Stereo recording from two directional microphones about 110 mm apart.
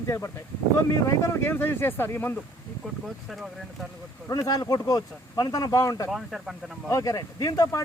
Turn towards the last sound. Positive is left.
turn(degrees=30)  # may be behind; listen again after turning